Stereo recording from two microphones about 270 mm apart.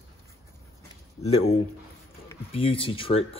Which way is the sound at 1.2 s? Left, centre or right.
Left.